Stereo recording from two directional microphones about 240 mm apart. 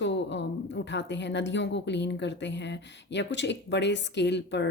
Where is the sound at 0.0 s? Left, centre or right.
Left.